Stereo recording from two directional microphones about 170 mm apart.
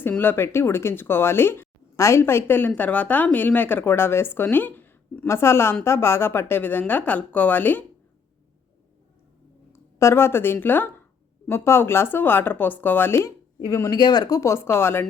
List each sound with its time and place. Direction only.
0.0 s speech: 10° left (ahead or behind)
9.7 s speech: 15° left (ahead or behind)